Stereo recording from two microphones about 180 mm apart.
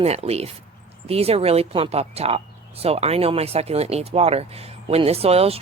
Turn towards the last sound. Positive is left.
turn(degrees=-35)  # may be behind; listen again after turning